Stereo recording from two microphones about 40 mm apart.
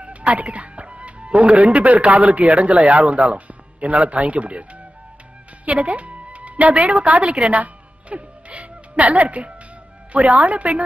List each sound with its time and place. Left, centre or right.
0.0 s a woman's voice: right
5.7 s a woman's voice: right
7.3 s music: right
10.1 s a woman's voice: right